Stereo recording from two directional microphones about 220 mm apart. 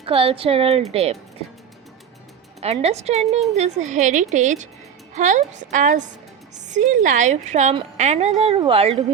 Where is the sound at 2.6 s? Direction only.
30° right (ahead or behind).